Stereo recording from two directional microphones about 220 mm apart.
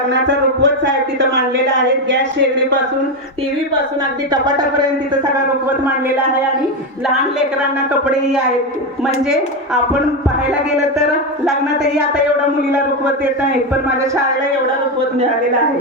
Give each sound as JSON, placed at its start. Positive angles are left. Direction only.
{"t": 0.1, "sound": "speech", "side_deg": -50}
{"t": 4.3, "sound": "speech", "side_deg": -20}